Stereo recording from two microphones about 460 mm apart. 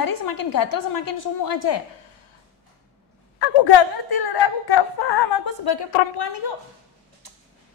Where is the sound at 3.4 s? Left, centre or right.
Left.